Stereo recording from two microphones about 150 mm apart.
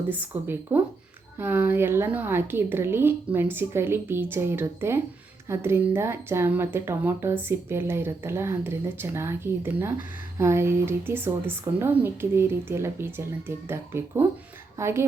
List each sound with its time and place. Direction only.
0.1 s speech: 15° right (ahead or behind)